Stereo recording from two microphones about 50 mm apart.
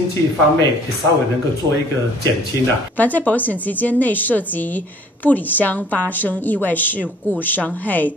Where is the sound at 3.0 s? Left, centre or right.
Left.